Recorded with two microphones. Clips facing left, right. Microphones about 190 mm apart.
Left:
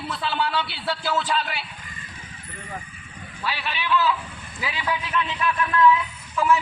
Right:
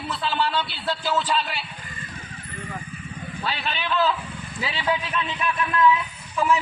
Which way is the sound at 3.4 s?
35° right (ahead or behind).